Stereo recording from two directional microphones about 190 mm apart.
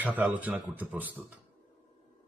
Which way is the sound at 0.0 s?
10° right (ahead or behind).